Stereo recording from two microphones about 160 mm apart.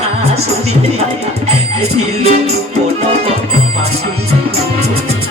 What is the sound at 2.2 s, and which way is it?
Music, 40° right (ahead or behind).